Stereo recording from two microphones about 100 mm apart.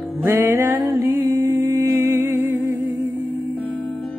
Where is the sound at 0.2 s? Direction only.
25° right (ahead or behind).